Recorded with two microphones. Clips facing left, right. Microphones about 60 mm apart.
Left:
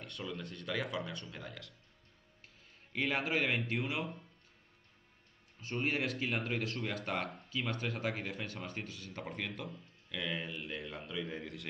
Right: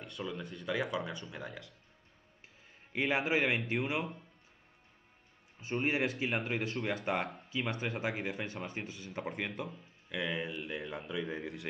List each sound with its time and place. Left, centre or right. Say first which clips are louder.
0.0 s speech: right 2 dB; centre
2.9 s speech: right 3 dB; centre
3.7 s speech: right 3 dB; centre
5.6 s speech: right 3 dB; centre
10.0 s speech: right 3 dB; centre